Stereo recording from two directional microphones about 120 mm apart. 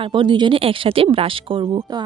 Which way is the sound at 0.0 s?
40° right (ahead or behind).